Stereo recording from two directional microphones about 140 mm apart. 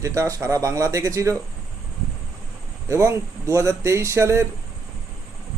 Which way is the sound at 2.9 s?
20° right (ahead or behind).